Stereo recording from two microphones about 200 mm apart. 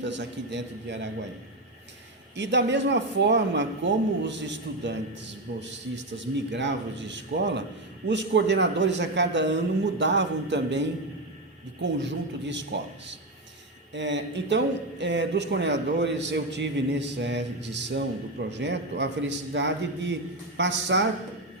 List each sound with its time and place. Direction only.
0.0 s speech: 65° right (ahead or behind)
2.3 s speech: 60° right (ahead or behind)
12.7 s speech: 60° right (ahead or behind)
13.9 s speech: 60° right (ahead or behind)